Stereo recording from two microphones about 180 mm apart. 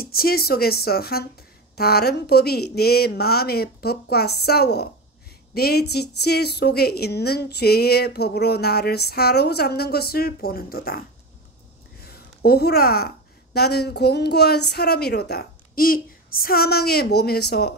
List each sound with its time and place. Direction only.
0.0 s a woman's voice: 55° left (ahead or behind)